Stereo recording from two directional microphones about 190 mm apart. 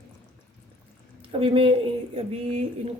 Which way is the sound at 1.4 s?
30° right (ahead or behind).